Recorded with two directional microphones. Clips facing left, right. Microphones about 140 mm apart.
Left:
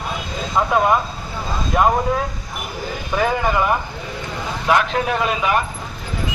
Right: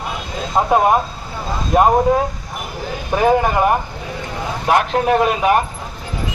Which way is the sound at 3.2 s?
50° right (ahead or behind).